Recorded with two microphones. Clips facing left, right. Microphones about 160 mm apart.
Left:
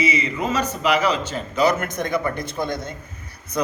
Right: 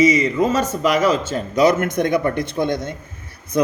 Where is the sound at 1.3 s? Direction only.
50° right (ahead or behind).